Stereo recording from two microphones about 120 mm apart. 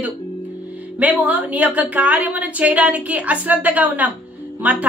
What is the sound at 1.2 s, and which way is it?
A woman's voice, 15° right (ahead or behind).